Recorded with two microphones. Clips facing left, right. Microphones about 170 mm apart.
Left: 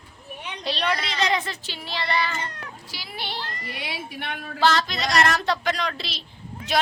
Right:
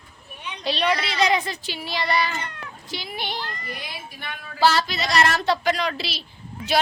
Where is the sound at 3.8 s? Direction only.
70° left (ahead or behind).